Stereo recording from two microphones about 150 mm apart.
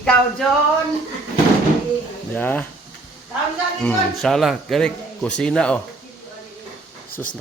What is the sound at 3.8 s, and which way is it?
Speech, 5° left (ahead or behind).